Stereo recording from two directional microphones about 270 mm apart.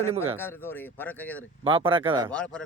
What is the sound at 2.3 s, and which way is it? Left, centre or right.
Speech, centre.